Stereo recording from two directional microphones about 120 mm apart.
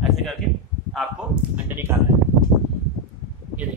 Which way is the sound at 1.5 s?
20° right (ahead or behind).